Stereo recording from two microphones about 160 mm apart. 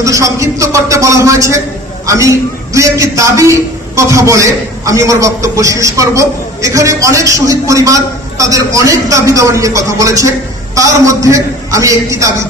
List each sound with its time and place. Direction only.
0.0 s a man's voice: 20° right (ahead or behind)